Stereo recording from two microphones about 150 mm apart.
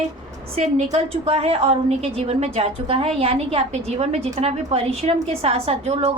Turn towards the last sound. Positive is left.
turn(degrees=-45)  # may be behind; listen again after turning